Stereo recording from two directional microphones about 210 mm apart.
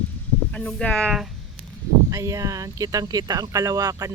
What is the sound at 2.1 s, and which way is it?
Speech, 15° right (ahead or behind).